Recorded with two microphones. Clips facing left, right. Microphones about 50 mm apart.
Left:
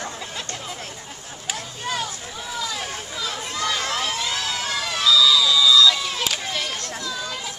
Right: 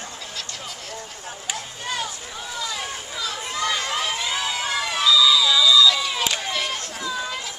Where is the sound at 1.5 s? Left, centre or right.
Centre.